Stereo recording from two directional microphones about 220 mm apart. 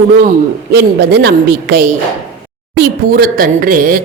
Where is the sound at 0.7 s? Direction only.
50° right (ahead or behind).